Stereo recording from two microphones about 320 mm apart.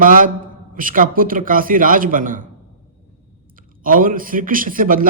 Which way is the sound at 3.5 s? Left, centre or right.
Right.